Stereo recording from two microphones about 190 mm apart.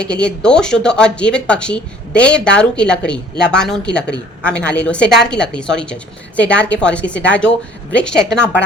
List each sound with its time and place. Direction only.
0.0 s speech: 5° left (ahead or behind)